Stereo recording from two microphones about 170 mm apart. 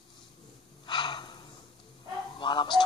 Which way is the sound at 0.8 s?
25° left (ahead or behind).